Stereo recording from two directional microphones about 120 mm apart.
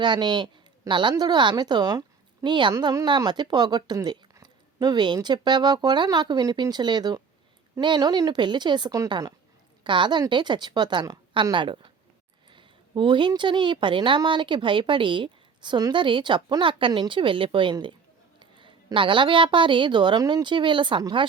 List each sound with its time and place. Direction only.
0.0 s a woman's voice: 40° right (ahead or behind)